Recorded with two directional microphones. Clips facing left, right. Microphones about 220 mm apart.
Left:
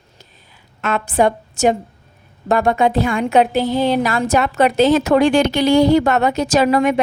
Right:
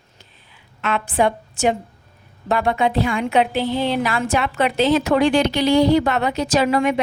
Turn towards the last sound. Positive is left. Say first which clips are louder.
# left 3 dB
turn(degrees=45)  # may be behind; listen again after turning